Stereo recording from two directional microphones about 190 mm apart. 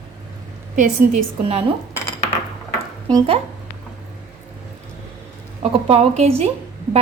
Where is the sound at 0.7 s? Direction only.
45° right (ahead or behind).